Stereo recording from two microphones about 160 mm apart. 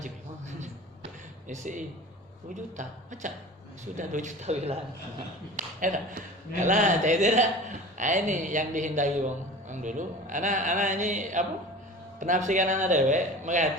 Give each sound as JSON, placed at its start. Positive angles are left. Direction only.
{"t": 1.5, "sound": "a man's voice", "side_deg": -50}
{"t": 5.5, "sound": "a man's voice", "side_deg": -55}